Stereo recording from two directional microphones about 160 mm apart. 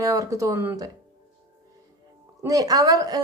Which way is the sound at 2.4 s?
20° right (ahead or behind).